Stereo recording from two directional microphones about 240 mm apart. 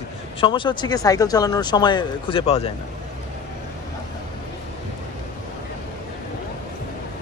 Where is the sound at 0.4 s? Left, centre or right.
Left.